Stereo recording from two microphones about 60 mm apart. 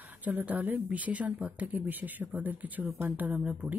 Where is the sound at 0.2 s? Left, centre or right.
Right.